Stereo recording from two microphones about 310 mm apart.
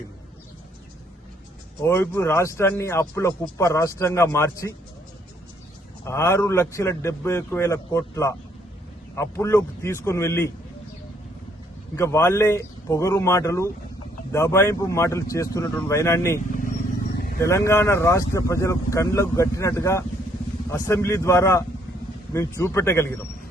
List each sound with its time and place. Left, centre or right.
1.8 s speech: centre
6.1 s speech: centre
11.9 s speech: centre
17.2 s vehicle: left
17.4 s speech: centre